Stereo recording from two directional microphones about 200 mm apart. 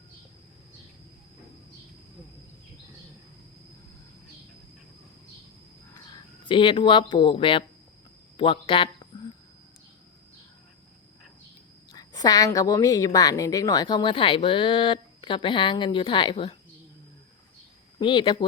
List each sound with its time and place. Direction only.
6.4 s speech: 25° left (ahead or behind)
11.9 s a woman's voice: 20° left (ahead or behind)
18.0 s speech: 25° left (ahead or behind)